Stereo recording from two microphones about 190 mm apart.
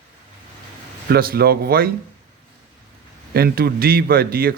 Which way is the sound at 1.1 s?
55° right (ahead or behind).